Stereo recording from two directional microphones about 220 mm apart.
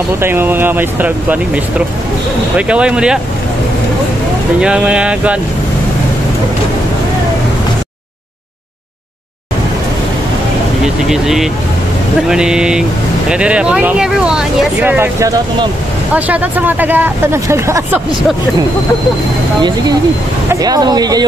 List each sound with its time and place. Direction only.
0.2 s speech: 10° right (ahead or behind)
4.6 s speech: 5° right (ahead or behind)
11.1 s speech: centre (ahead or behind)
20.6 s speech: 20° right (ahead or behind)